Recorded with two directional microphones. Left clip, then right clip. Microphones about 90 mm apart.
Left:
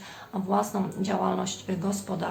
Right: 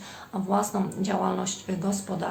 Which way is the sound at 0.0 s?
35° right (ahead or behind).